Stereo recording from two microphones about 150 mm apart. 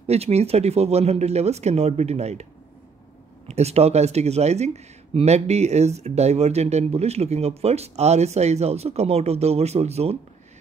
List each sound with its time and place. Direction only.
0.0 s speech: 45° right (ahead or behind)
3.4 s speech: 45° right (ahead or behind)